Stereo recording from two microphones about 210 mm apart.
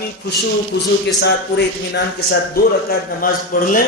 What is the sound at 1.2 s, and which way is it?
A man's voice, 55° left (ahead or behind).